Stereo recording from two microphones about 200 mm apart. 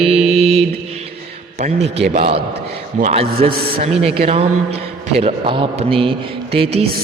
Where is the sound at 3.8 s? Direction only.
30° right (ahead or behind).